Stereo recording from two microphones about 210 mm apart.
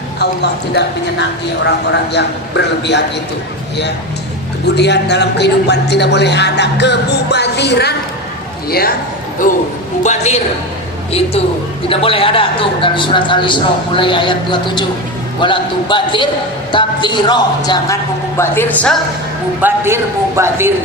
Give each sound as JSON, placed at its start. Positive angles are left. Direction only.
{"t": 0.2, "sound": "a man's voice", "side_deg": 55}
{"t": 4.7, "sound": "a man's voice", "side_deg": 55}
{"t": 10.0, "sound": "a man's voice", "side_deg": 35}
{"t": 11.9, "sound": "a man's voice", "side_deg": 25}
{"t": 19.6, "sound": "a man's voice", "side_deg": -10}